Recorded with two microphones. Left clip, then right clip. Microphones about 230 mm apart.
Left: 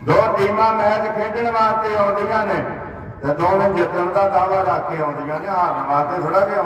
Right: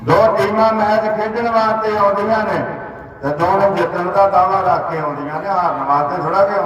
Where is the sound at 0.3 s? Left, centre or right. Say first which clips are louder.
Right 2 dB; right.